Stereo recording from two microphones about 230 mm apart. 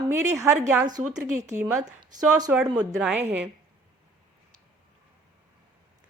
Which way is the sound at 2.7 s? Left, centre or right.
Centre.